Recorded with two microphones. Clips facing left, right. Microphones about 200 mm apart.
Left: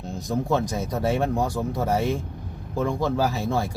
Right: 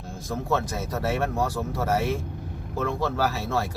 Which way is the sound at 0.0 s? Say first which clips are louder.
Left 5 dB; 15° left (ahead or behind).